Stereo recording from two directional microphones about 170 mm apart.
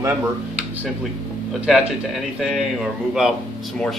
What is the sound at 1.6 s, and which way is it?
Speech, centre (ahead or behind).